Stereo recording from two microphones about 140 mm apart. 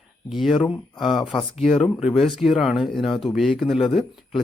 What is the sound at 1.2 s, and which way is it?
Speech, 35° left (ahead or behind).